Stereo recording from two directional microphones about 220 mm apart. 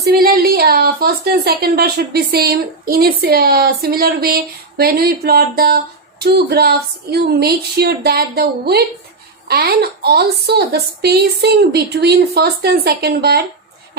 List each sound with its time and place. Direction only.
0.0 s speech: 45° right (ahead or behind)